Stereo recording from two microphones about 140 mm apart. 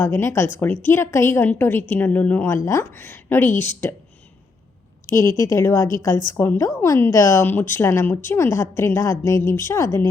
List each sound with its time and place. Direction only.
0.0 s a woman's voice: 15° left (ahead or behind)
5.1 s a woman's voice: 20° left (ahead or behind)